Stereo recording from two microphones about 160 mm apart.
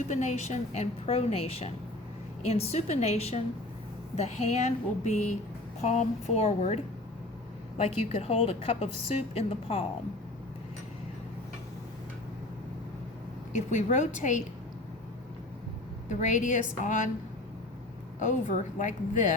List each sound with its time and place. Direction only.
0.1 s a woman's voice: 45° left (ahead or behind)
7.9 s a woman's voice: 40° left (ahead or behind)
13.7 s a woman's voice: 50° left (ahead or behind)
16.0 s a woman's voice: 50° left (ahead or behind)
18.8 s a woman's voice: 55° left (ahead or behind)